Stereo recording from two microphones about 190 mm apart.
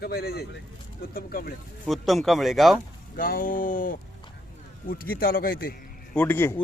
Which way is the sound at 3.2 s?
45° left (ahead or behind).